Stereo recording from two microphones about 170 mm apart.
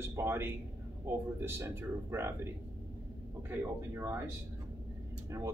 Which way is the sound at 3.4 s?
15° right (ahead or behind).